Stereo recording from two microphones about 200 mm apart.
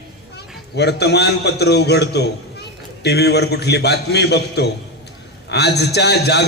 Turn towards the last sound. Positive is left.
turn(degrees=55)  # may be behind; listen again after turning